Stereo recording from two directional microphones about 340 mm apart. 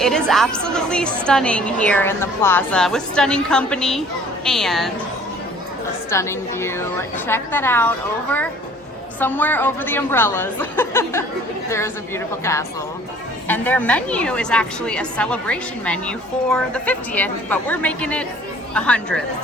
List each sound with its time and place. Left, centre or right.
0.0 s a woman's voice: centre
6.1 s a woman's voice: centre